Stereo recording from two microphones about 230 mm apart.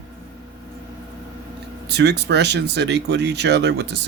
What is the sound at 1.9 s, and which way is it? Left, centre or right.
Speech, right.